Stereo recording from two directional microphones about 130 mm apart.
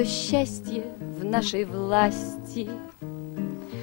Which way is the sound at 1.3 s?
5° left (ahead or behind).